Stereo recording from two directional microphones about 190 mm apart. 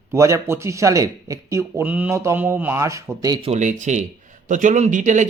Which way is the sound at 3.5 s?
40° right (ahead or behind).